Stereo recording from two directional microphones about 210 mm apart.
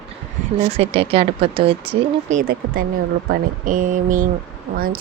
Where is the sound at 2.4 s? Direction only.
45° right (ahead or behind).